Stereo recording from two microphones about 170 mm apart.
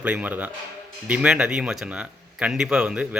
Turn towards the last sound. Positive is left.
turn(degrees=-5)  # may be behind; listen again after turning